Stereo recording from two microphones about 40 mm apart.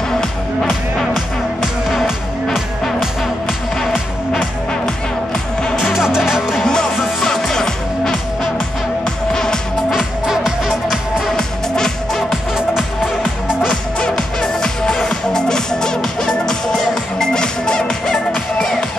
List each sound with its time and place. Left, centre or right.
0.2 s music: centre
1.9 s music: centre
4.6 s music: centre
5.8 s music: centre
6.6 s music: centre
7.0 s music: centre
7.2 s music: centre
10.2 s music: centre
11.3 s music: centre
12.3 s music: centre
13.9 s music: centre